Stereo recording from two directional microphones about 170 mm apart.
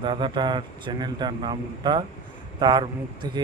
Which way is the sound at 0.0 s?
30° right (ahead or behind).